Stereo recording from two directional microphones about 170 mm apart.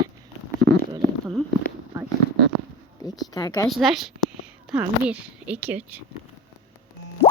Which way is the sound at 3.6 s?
Centre (ahead or behind).